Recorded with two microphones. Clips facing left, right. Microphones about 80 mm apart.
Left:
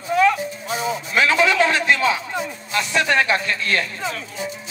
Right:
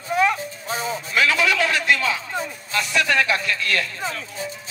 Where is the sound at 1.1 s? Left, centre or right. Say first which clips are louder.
Left 2 dB; left.